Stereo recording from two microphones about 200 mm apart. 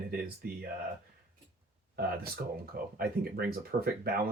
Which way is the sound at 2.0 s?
50° right (ahead or behind).